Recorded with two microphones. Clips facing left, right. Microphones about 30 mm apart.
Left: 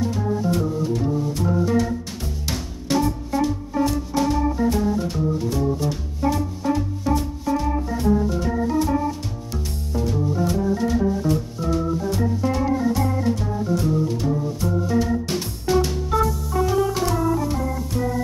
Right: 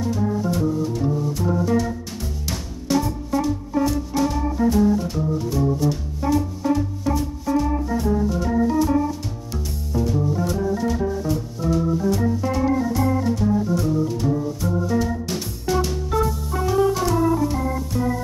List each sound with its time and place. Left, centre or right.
0.1 s music: centre
2.4 s music: centre
7.4 s organ: centre
9.5 s music: centre
10.7 s organ: centre
15.3 s music: centre
16.3 s music: centre
17.0 s organ: centre